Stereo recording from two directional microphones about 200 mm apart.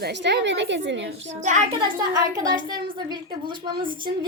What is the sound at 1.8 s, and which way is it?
A woman's voice, 20° right (ahead or behind).